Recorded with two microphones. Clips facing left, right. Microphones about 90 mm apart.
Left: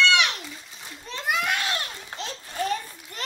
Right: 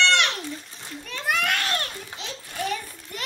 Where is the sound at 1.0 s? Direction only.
20° left (ahead or behind).